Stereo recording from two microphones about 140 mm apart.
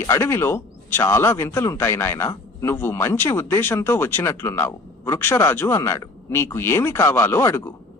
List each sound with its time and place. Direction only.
0.1 s speech: 15° left (ahead or behind)